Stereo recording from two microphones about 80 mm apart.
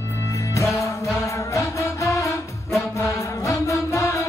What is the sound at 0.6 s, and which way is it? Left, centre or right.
Music, left.